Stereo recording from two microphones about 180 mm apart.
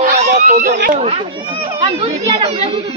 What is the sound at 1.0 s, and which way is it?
Speech, 30° right (ahead or behind).